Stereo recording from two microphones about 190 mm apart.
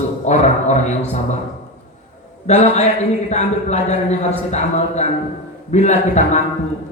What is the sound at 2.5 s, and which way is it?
Speech, 35° left (ahead or behind).